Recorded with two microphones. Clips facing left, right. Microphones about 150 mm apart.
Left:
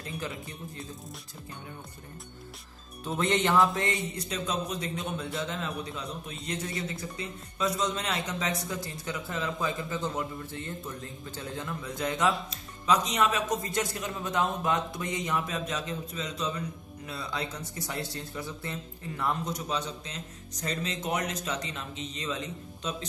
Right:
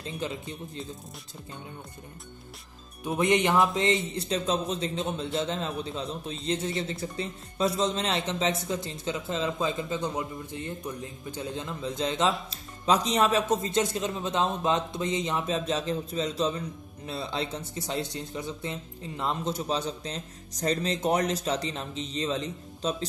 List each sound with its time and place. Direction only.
0.0 s a man's voice: 25° right (ahead or behind)
3.0 s a man's voice: 15° right (ahead or behind); by 23.0 s 30° right (ahead or behind)